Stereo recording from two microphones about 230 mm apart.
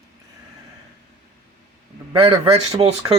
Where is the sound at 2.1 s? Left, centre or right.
Right.